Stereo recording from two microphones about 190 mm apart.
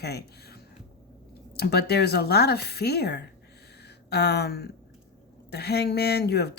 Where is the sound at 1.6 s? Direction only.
60° left (ahead or behind).